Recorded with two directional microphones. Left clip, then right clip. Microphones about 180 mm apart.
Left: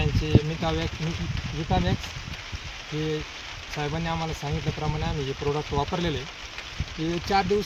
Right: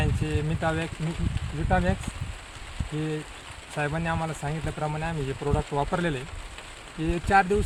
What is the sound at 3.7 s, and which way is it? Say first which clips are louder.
Speech: right 1 dB; 5° left (ahead or behind).